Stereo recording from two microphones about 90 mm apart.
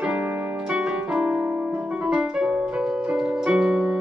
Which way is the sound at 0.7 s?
10° right (ahead or behind).